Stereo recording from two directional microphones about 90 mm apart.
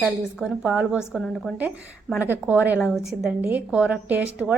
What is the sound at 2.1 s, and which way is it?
Speech, 20° right (ahead or behind).